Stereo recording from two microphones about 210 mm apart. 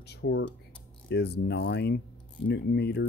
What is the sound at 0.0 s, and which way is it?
Speech, 50° left (ahead or behind).